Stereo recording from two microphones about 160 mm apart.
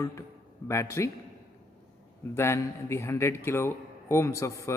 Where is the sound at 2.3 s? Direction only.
15° left (ahead or behind).